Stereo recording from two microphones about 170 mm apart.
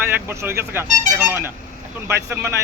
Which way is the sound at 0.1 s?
15° right (ahead or behind).